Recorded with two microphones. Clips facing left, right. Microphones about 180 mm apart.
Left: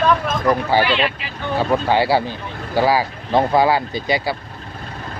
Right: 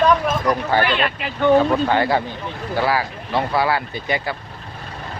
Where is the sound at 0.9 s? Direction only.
55° right (ahead or behind).